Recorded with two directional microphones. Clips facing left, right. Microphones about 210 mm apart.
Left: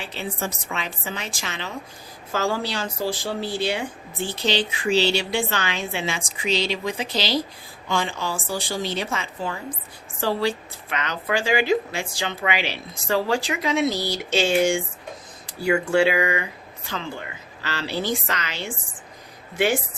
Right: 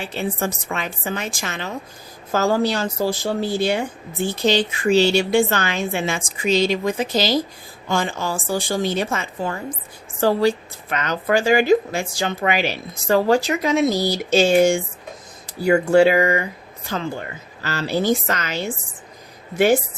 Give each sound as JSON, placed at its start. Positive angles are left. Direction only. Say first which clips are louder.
{"t": 0.1, "sound": "speech", "louder": "right 6 dB", "side_deg": -50}